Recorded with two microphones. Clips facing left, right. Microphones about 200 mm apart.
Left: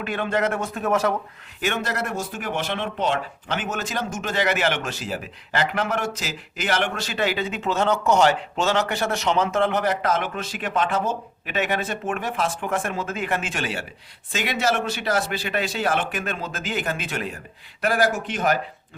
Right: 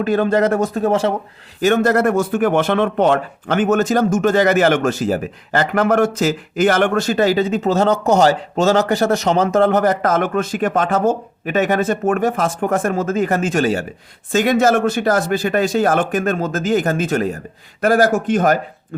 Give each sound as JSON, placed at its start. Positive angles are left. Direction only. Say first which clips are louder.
{"t": 0.0, "sound": "speech", "louder": "right 9 dB", "side_deg": -40}
{"t": 1.6, "sound": "speech", "louder": "right 12 dB", "side_deg": -45}